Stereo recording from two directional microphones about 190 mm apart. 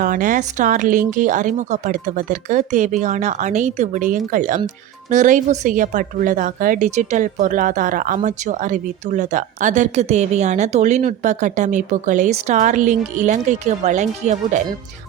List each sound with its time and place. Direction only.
0.0 s speech: 45° right (ahead or behind)